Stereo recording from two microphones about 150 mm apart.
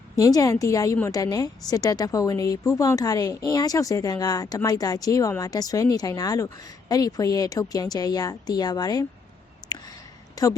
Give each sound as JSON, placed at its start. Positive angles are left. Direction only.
{"t": 0.2, "sound": "a woman's voice", "side_deg": 25}
{"t": 9.7, "sound": "a sound", "side_deg": 25}
{"t": 10.4, "sound": "a woman's voice", "side_deg": 25}